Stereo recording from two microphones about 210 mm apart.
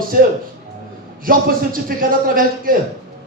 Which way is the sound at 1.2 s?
40° right (ahead or behind).